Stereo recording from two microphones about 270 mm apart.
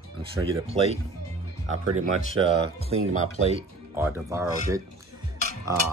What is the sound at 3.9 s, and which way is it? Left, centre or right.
Speech, centre.